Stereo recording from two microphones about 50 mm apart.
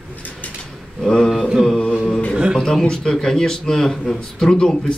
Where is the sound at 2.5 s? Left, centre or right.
Centre.